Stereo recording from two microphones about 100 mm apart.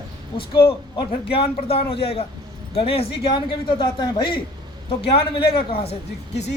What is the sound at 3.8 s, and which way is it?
Speech, 50° left (ahead or behind).